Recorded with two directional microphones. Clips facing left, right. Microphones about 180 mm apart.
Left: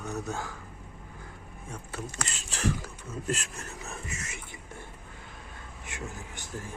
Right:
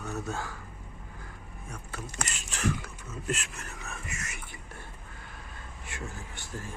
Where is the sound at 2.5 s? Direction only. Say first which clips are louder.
Left 1 dB; 35° left (ahead or behind).